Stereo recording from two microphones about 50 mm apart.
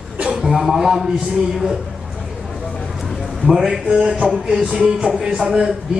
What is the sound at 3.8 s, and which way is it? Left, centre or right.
A man's voice, centre.